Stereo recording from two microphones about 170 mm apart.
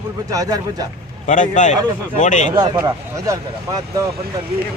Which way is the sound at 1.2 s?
50° left (ahead or behind).